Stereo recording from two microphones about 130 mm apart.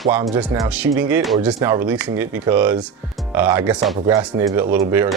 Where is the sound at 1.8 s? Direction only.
10° right (ahead or behind).